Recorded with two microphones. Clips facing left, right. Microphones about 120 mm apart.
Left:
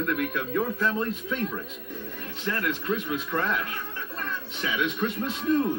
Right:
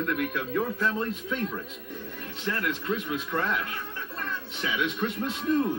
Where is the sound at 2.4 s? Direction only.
20° right (ahead or behind).